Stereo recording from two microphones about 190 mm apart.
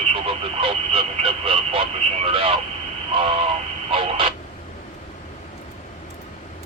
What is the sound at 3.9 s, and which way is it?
Radio, 25° right (ahead or behind).